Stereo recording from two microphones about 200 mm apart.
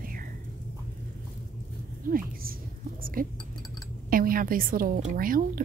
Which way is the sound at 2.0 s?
45° right (ahead or behind).